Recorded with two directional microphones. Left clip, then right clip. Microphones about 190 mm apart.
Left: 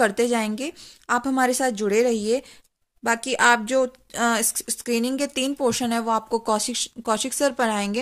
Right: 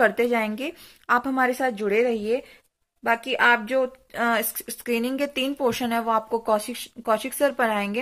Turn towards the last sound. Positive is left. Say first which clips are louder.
# even
turn(degrees=35)  # may be behind; listen again after turning